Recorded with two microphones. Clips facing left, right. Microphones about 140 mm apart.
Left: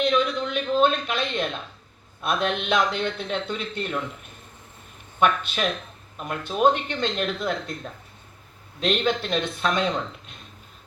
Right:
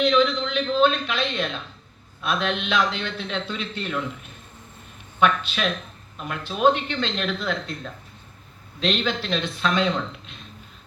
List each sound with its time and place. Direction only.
0.0 s a sound: 50° left (ahead or behind)
2.2 s a man's voice: 50° left (ahead or behind)
5.2 s a man's voice: 50° left (ahead or behind)
8.8 s a man's voice: 50° left (ahead or behind)